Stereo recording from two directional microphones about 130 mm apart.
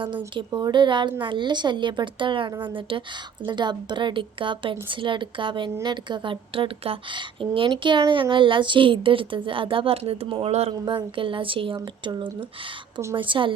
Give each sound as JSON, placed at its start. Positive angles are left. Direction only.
{"t": 0.3, "sound": "a woman's voice", "side_deg": -35}